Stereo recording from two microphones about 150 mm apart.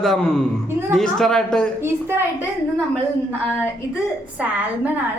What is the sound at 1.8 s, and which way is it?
Speech, 15° right (ahead or behind).